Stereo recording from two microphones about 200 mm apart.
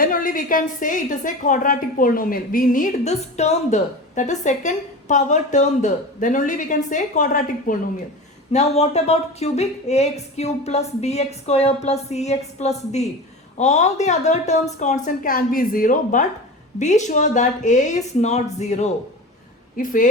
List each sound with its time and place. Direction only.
0.0 s a woman's voice: 45° left (ahead or behind)